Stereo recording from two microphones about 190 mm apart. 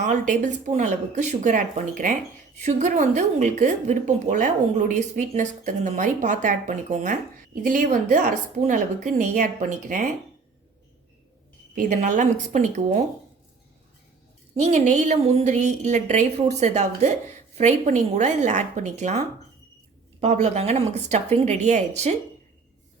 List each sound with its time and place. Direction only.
0.0 s a woman's voice: 40° right (ahead or behind)
11.7 s a woman's voice: 45° right (ahead or behind)
14.6 s a woman's voice: 40° right (ahead or behind)
20.2 s a woman's voice: 35° right (ahead or behind)